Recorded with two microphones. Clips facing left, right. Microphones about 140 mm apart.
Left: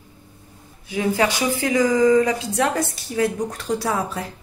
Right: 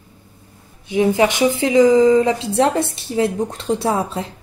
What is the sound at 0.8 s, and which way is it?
A woman's voice, 20° right (ahead or behind).